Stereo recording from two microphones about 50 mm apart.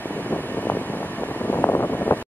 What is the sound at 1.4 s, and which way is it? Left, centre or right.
Vehicle, left.